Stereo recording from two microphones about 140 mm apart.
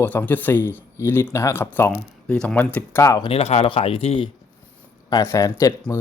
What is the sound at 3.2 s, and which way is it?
Speech, 45° left (ahead or behind).